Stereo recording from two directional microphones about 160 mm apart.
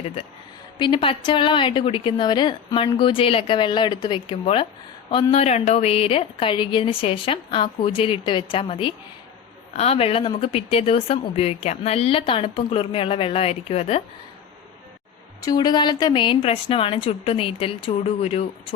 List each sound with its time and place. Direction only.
0.8 s a woman's voice: 30° left (ahead or behind)
15.4 s a woman's voice: 25° left (ahead or behind); by 18.4 s 40° left (ahead or behind)